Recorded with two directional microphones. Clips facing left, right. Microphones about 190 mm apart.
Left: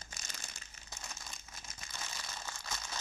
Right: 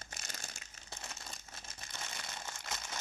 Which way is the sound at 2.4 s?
20° right (ahead or behind).